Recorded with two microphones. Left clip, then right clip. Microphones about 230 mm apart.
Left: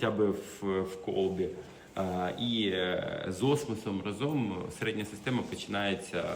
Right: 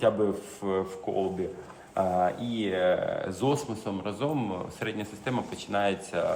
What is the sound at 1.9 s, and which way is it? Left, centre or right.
A man's voice, centre.